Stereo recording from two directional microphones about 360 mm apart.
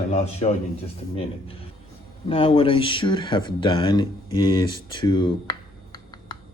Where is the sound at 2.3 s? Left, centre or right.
Centre.